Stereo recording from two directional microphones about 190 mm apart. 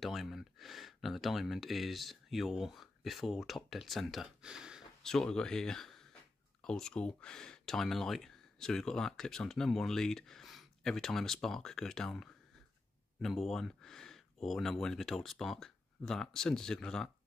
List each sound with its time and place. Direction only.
0.0 s speech: centre (ahead or behind)